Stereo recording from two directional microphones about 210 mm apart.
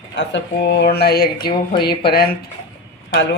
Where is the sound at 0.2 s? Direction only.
55° left (ahead or behind).